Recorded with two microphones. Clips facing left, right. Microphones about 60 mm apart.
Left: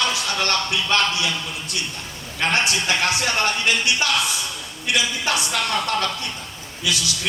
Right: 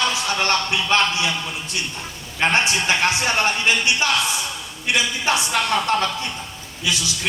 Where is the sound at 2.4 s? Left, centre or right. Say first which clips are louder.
Right 2 dB; right.